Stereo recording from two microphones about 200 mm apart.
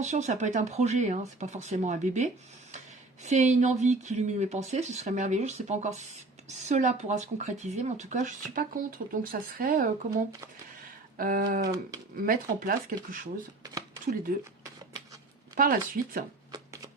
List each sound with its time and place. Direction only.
0.0 s speech: 35° right (ahead or behind)
15.5 s speech: 45° right (ahead or behind)
16.5 s a sound: 15° right (ahead or behind)